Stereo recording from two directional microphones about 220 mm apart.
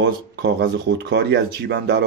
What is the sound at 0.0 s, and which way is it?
Speech, 45° right (ahead or behind).